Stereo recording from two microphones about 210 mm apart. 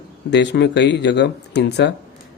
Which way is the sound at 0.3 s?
55° left (ahead or behind).